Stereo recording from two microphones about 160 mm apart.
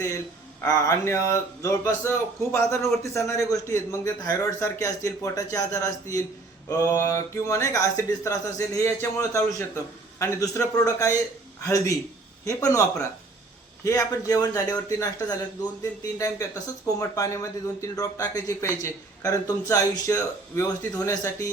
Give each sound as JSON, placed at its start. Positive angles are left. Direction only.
{"t": 0.6, "sound": "speech", "side_deg": 20}
{"t": 16.8, "sound": "speech", "side_deg": 20}